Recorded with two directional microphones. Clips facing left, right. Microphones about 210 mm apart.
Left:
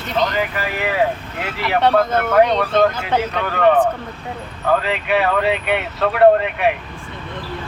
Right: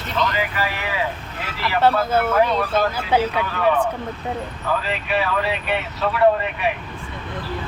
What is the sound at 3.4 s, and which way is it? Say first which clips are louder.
Speech: left 5 dB; 60° left (ahead or behind).